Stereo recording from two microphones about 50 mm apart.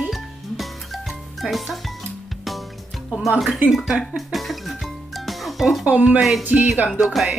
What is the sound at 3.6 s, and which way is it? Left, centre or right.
Speech, centre.